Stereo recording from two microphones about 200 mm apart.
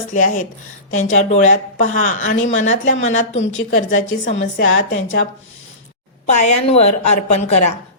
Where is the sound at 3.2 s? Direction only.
70° left (ahead or behind).